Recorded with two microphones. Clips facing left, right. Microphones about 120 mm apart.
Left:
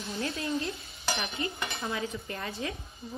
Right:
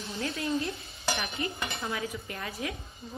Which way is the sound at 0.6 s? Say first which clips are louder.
Right 1 dB; 25° left (ahead or behind).